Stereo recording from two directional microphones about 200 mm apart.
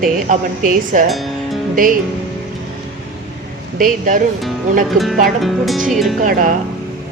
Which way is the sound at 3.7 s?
45° right (ahead or behind).